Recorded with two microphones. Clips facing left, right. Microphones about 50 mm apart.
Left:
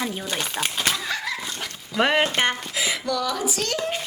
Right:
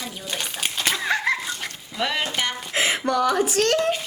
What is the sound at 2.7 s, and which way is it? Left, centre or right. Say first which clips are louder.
Speech: right 4 dB; right.